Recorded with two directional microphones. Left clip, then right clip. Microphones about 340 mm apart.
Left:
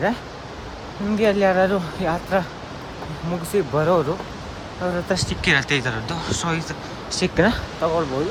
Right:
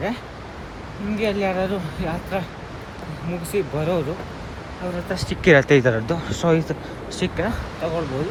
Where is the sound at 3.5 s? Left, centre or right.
Centre.